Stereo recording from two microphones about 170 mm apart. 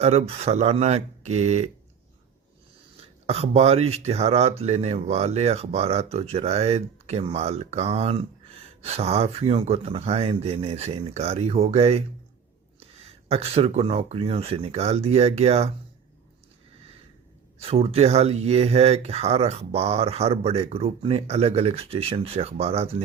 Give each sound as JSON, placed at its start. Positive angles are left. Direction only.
{"t": 0.0, "sound": "speech", "side_deg": -40}
{"t": 3.2, "sound": "speech", "side_deg": -40}
{"t": 17.6, "sound": "speech", "side_deg": -35}